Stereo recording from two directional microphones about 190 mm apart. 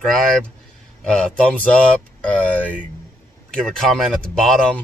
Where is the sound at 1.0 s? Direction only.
5° left (ahead or behind).